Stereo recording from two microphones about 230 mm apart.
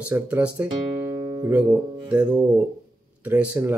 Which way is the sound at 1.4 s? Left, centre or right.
Centre.